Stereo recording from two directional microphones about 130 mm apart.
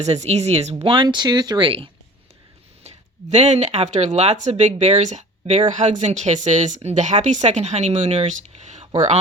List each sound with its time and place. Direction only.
0.0 s speech: 55° right (ahead or behind)
2.8 s speech: 60° right (ahead or behind)